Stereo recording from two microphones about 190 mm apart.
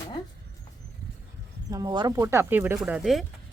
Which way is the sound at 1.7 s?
20° right (ahead or behind).